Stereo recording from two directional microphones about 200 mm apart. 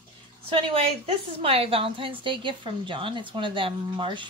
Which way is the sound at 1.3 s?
30° right (ahead or behind).